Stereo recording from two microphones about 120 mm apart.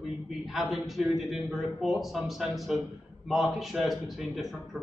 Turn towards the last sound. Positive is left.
turn(degrees=0)  # may be behind; listen again after turning